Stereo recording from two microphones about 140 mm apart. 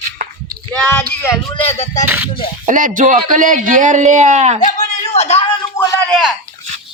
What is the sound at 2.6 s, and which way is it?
A man's voice, 70° right (ahead or behind).